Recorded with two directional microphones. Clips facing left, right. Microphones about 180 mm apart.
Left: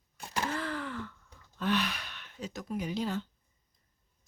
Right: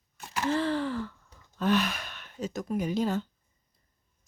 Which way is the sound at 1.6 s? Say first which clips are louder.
Right 5 dB; 45° right (ahead or behind).